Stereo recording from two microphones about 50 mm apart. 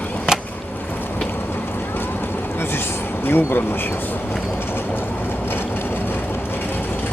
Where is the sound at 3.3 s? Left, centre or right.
Left.